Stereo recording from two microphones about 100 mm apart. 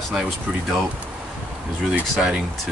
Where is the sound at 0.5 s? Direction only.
15° right (ahead or behind).